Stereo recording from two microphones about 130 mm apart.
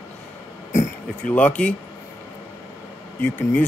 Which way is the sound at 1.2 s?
10° left (ahead or behind).